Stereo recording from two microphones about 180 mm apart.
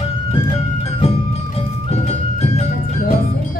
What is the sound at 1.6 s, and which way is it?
Music, 35° left (ahead or behind).